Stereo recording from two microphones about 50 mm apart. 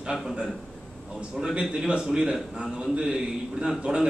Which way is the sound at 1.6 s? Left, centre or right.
Centre.